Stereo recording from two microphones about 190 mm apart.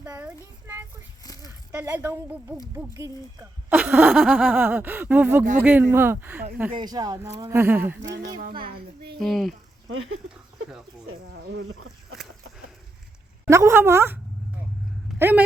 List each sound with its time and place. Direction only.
0.0 s a sound: 15° right (ahead or behind)
1.2 s a sound: 20° left (ahead or behind)
1.7 s speech: 10° right (ahead or behind)
8.4 s speech: 50° right (ahead or behind)
9.1 s speech: centre (ahead or behind)
11.3 s speech: 65° right (ahead or behind)
13.4 s speech: 15° right (ahead or behind)
15.2 s speech: 10° right (ahead or behind)